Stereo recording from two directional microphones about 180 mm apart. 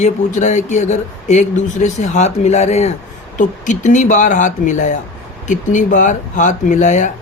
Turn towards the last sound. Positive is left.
turn(degrees=40)  # may be behind; listen again after turning